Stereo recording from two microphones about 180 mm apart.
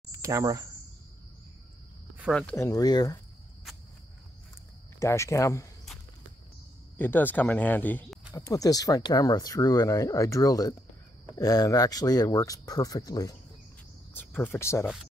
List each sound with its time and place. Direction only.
0.1 s speech: 15° right (ahead or behind)
2.3 s speech: 10° left (ahead or behind)
5.0 s speech: 15° left (ahead or behind)
7.0 s speech: 10° left (ahead or behind)